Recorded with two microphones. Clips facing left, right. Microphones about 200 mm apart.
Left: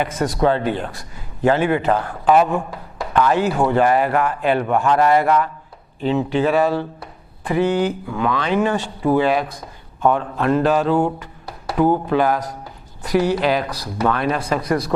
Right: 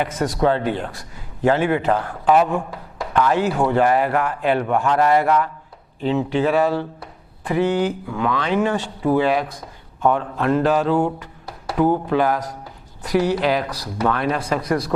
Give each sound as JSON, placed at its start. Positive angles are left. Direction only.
{"t": 0.4, "sound": "speech", "side_deg": 15}
{"t": 11.2, "sound": "a sound", "side_deg": 15}
{"t": 12.0, "sound": "speech", "side_deg": 15}